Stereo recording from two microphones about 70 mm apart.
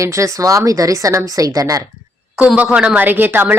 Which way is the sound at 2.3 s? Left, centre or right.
Centre.